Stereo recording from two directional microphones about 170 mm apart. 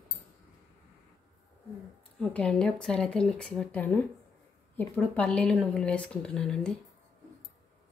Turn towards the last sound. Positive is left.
turn(degrees=5)  # may be behind; listen again after turning